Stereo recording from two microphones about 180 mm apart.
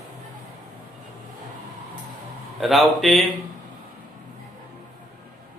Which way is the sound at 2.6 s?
Centre (ahead or behind).